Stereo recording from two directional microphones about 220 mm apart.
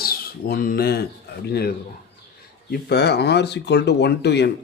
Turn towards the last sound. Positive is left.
turn(degrees=50)  # may be behind; listen again after turning